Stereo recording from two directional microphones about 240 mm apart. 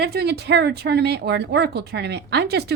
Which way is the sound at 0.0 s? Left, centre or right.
Right.